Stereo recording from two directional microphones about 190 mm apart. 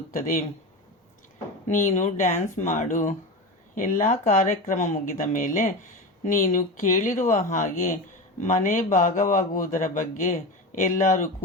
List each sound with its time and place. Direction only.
1.6 s a man's voice: 40° left (ahead or behind)